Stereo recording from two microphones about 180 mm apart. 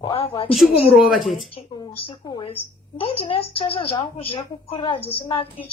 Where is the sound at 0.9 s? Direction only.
Centre (ahead or behind).